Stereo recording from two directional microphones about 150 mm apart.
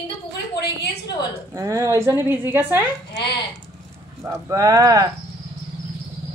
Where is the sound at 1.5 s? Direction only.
20° right (ahead or behind).